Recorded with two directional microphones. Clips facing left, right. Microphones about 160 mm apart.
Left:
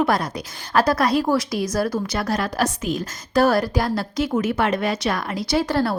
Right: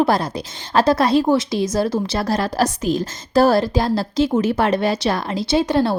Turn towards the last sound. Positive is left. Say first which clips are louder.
# right 3 dB
turn(degrees=-20)  # may be behind; listen again after turning